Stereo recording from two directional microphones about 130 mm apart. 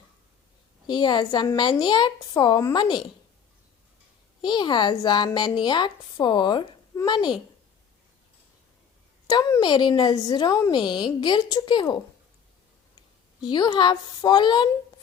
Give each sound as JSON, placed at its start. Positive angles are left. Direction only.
{"t": 0.9, "sound": "speech", "side_deg": 35}
{"t": 4.4, "sound": "a woman's voice", "side_deg": 35}
{"t": 9.2, "sound": "a woman's voice", "side_deg": 30}
{"t": 13.4, "sound": "speech", "side_deg": 35}